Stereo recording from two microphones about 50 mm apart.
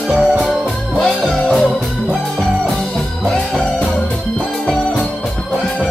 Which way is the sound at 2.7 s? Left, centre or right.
Centre.